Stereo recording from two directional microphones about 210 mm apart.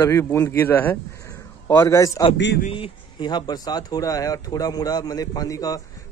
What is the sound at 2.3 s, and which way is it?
Speech, 55° left (ahead or behind).